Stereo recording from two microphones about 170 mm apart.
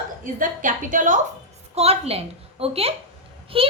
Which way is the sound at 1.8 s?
35° right (ahead or behind).